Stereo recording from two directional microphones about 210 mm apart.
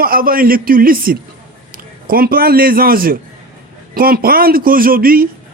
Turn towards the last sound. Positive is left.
turn(degrees=-45)  # may be behind; listen again after turning